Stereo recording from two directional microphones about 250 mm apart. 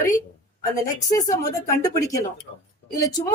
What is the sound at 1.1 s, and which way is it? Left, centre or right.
Speech, centre.